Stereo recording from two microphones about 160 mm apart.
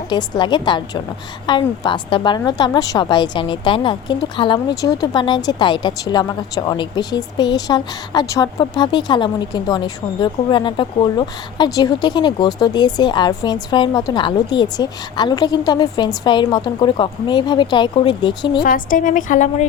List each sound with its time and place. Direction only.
0.1 s a woman's voice: 30° left (ahead or behind)
18.6 s a woman's voice: 60° left (ahead or behind)